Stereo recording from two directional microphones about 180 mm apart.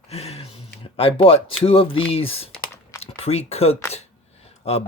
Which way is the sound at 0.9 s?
30° left (ahead or behind).